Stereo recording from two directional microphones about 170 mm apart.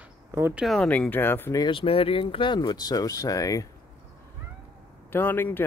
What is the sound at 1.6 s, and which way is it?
Speech, 30° left (ahead or behind).